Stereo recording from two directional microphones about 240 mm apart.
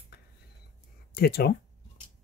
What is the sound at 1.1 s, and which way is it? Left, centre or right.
Speech, left.